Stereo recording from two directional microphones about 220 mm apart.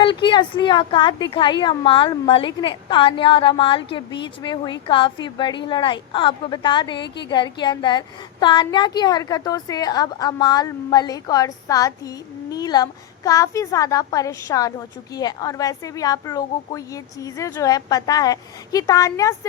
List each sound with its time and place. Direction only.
0.0 s a woman's voice: 20° left (ahead or behind)